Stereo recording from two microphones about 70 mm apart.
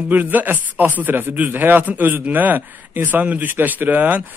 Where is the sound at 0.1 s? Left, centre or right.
Right.